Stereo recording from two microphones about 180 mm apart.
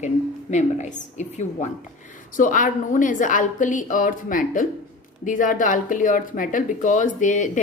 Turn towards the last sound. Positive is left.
turn(degrees=45)  # may be behind; listen again after turning